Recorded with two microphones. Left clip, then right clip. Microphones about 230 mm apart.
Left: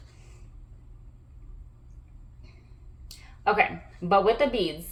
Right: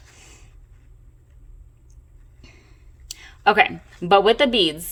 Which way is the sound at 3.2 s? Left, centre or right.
Right.